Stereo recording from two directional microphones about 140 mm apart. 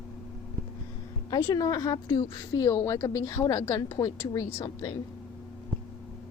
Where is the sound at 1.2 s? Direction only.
30° left (ahead or behind).